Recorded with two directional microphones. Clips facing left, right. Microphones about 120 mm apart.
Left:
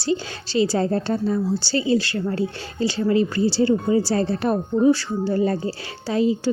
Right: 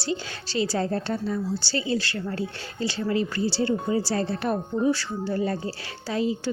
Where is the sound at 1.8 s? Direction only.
20° left (ahead or behind).